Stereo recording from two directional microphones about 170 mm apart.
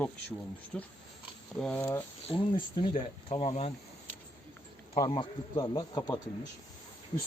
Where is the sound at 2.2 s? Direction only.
30° left (ahead or behind).